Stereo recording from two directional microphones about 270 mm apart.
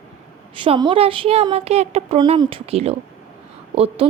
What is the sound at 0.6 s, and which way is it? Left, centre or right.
Speech, centre.